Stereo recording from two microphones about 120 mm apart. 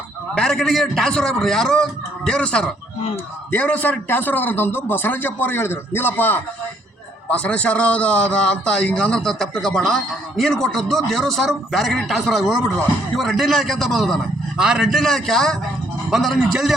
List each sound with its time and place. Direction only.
0.3 s a man's voice: 5° left (ahead or behind)